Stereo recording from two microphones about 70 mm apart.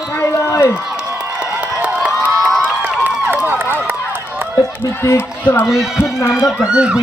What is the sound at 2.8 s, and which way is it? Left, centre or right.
Run, right.